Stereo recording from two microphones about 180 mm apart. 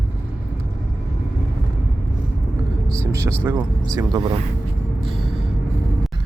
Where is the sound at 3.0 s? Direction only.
15° right (ahead or behind).